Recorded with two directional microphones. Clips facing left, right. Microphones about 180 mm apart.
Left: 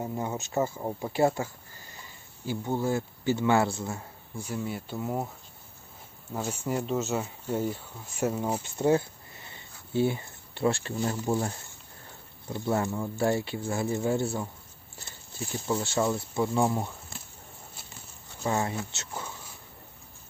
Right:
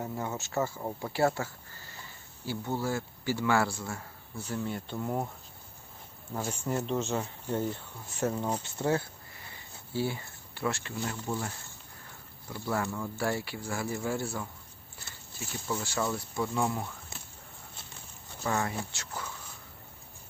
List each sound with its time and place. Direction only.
0.0 s speech: 20° left (ahead or behind)
6.3 s speech: 10° left (ahead or behind); by 11.5 s 35° left (ahead or behind)
12.5 s speech: 25° left (ahead or behind)
18.4 s speech: 20° left (ahead or behind)